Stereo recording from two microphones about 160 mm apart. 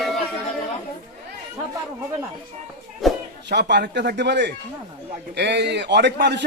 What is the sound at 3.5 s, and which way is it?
A man's voice, 90° right.